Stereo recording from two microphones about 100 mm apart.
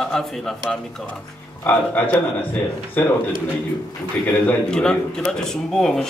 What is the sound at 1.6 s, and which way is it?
A man's voice, 15° left (ahead or behind).